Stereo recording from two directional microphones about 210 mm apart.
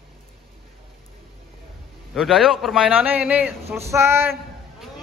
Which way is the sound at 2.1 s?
Centre (ahead or behind).